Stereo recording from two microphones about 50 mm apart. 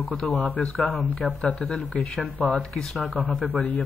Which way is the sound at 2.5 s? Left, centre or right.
Centre.